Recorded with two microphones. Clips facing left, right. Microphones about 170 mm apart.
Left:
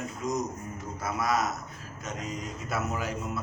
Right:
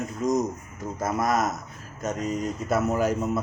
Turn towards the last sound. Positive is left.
turn(degrees=-45)  # may be behind; listen again after turning